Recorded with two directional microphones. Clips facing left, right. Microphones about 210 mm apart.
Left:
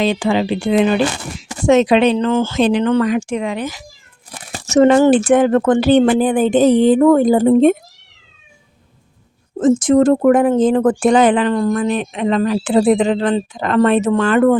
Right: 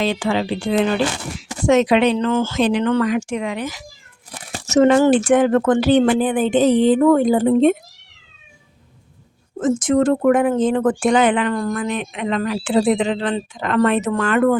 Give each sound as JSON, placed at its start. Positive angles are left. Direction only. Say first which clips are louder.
{"t": 0.0, "sound": "speech", "louder": "left 4 dB", "side_deg": 15}
{"t": 6.1, "sound": "a woman's voice", "louder": "left 3 dB", "side_deg": 40}
{"t": 9.6, "sound": "speech", "louder": "left 5 dB", "side_deg": 35}